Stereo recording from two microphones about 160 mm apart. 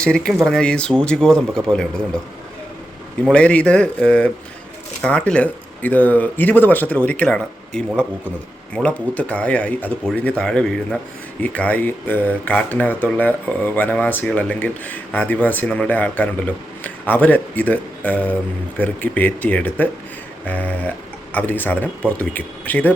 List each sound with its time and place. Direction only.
0.0 s speech: 5° left (ahead or behind)
3.2 s speech: 5° left (ahead or behind)